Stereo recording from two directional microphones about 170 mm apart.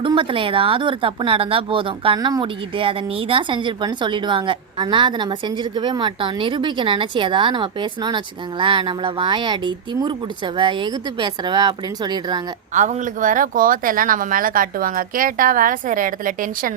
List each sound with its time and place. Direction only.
0.0 s speech: 30° right (ahead or behind)
12.7 s speech: 45° right (ahead or behind)